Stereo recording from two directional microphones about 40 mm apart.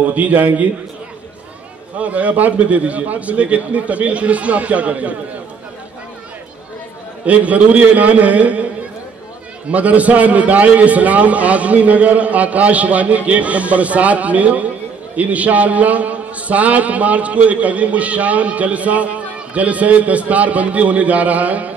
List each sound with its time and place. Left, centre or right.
0.0 s a man's voice: right
2.0 s a man's voice: right
7.2 s a man's voice: right
9.7 s a man's voice: right